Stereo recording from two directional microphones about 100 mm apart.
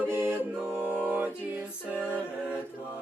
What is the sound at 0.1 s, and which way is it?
A capella, 20° right (ahead or behind).